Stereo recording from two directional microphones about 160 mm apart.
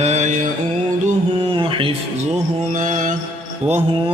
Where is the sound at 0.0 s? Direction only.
45° right (ahead or behind).